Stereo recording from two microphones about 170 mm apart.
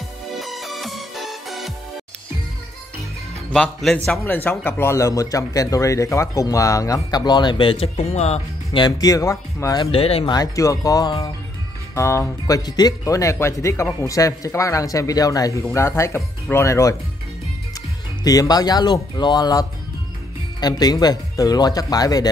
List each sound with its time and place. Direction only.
0.3 s music: centre (ahead or behind)
3.4 s speech: 5° left (ahead or behind); by 8.8 s 40° left (ahead or behind)
8.8 s speech: 20° left (ahead or behind)
9.8 s speech: 35° left (ahead or behind)
10.3 s speech: 20° left (ahead or behind)
18.2 s speech: 20° left (ahead or behind)
20.6 s speech: 25° left (ahead or behind)